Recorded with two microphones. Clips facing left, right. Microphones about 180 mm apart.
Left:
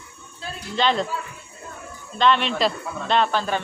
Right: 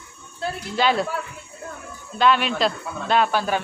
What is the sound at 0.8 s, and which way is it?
Speech, 5° right (ahead or behind).